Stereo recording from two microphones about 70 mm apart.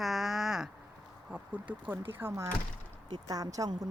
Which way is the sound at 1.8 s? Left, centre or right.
Right.